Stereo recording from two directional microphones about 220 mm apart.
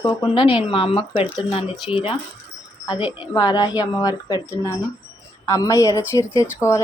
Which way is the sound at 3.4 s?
20° left (ahead or behind).